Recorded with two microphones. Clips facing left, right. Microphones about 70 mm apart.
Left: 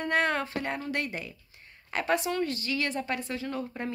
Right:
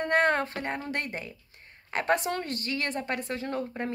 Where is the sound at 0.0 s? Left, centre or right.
Right.